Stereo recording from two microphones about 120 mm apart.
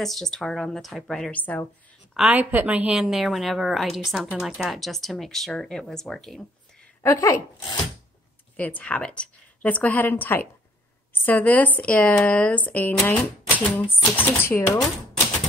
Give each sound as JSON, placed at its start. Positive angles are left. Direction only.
{"t": 0.0, "sound": "a woman's voice", "side_deg": 5}
{"t": 1.4, "sound": "speech", "side_deg": 15}
{"t": 2.1, "sound": "a woman's voice", "side_deg": -10}
{"t": 7.0, "sound": "speech", "side_deg": 25}
{"t": 8.5, "sound": "speech", "side_deg": 10}